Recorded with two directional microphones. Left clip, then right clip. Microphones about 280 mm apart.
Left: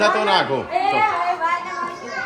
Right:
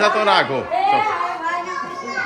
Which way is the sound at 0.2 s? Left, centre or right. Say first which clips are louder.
Right 2 dB; centre.